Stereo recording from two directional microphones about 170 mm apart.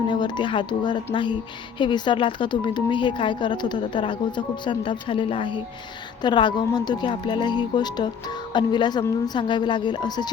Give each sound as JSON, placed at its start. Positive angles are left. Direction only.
{"t": 0.1, "sound": "speech", "side_deg": 25}